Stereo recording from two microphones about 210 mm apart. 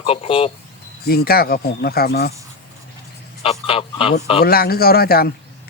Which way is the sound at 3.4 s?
25° left (ahead or behind).